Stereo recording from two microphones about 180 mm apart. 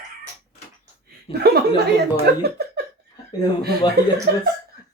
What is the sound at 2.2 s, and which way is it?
Speech, 65° right (ahead or behind).